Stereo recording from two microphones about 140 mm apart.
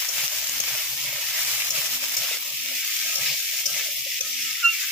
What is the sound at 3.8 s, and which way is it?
Frying, centre (ahead or behind).